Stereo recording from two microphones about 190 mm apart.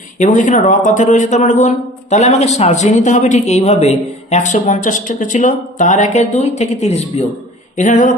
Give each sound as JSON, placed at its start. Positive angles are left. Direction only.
{"t": 0.2, "sound": "speech", "side_deg": 40}